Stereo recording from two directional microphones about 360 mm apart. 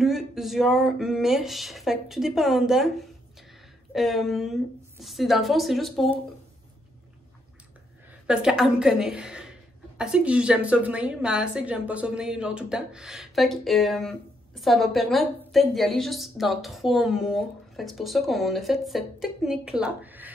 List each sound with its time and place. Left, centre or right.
0.0 s a woman's voice: centre
8.3 s a woman's voice: centre